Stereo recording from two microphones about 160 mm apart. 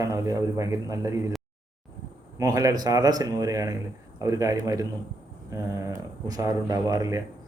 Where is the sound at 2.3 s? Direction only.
20° right (ahead or behind).